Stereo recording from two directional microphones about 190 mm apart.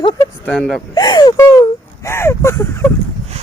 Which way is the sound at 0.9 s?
20° left (ahead or behind).